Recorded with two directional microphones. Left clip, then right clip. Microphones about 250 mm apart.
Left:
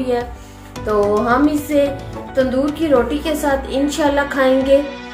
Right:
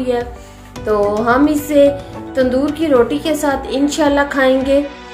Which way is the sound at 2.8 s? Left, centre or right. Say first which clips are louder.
Right 3 dB; right.